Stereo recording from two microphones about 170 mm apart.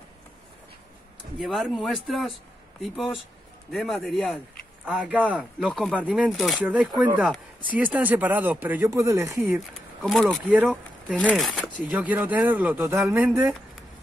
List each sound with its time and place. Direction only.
1.4 s speech: centre (ahead or behind); by 9.6 s 15° right (ahead or behind)
10.0 s speech: centre (ahead or behind)
10.5 s speech: 10° right (ahead or behind)
11.1 s speech: 5° left (ahead or behind)